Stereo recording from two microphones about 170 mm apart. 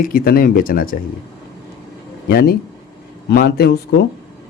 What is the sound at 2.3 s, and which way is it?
A man's voice, 65° left (ahead or behind).